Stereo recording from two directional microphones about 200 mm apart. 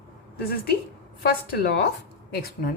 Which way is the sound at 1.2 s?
50° left (ahead or behind).